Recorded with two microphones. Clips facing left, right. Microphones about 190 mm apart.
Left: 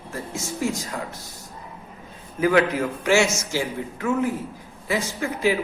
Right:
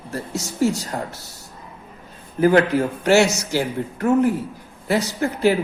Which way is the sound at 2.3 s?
40° right (ahead or behind).